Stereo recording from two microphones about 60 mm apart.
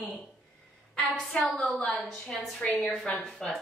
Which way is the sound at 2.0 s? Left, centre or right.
Centre.